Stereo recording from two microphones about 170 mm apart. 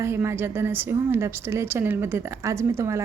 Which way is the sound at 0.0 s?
15° right (ahead or behind).